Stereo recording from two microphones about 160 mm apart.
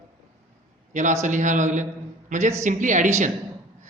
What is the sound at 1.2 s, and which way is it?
Speech, 50° right (ahead or behind).